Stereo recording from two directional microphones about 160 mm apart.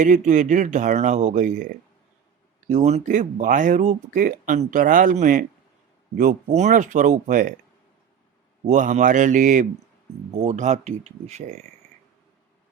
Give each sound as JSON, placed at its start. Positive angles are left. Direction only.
{"t": 0.0, "sound": "speech", "side_deg": -55}
{"t": 8.6, "sound": "speech", "side_deg": -50}